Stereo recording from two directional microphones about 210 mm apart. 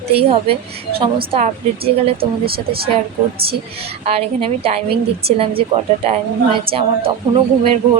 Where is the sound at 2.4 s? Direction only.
45° right (ahead or behind).